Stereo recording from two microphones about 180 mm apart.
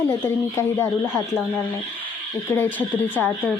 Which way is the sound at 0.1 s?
15° left (ahead or behind).